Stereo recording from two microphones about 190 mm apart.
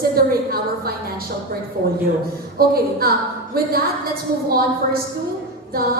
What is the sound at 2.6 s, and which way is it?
A woman's voice, 50° right (ahead or behind).